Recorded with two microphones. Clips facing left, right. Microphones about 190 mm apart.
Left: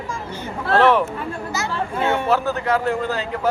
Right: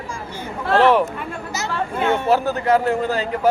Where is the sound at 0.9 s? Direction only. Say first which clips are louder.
Right 1 dB; 5° right (ahead or behind).